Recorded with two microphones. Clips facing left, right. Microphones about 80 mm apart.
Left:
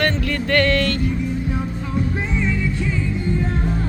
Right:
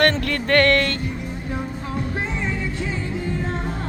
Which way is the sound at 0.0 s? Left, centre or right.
Right.